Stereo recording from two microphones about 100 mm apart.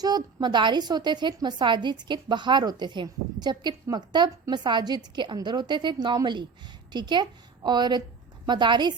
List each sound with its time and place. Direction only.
0.0 s a woman's voice: 45° right (ahead or behind)